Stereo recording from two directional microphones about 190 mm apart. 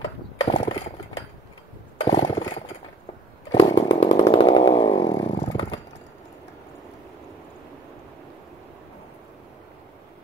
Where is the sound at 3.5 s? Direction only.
25° left (ahead or behind).